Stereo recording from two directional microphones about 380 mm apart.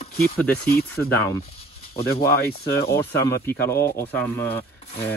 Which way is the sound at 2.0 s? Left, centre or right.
Centre.